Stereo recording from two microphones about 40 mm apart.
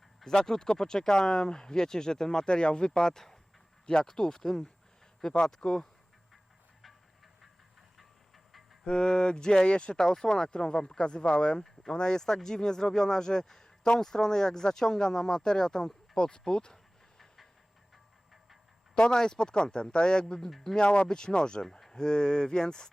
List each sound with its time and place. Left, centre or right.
0.3 s speech: centre
7.4 s train: centre
8.8 s speech: left
17.2 s a sound: centre
18.9 s speech: left
20.5 s speech: centre
20.7 s speech: left
21.1 s speech: centre